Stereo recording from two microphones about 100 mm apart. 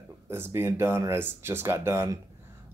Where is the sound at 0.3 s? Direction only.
20° right (ahead or behind).